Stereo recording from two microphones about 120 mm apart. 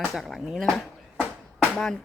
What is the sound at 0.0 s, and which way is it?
Speech, centre (ahead or behind).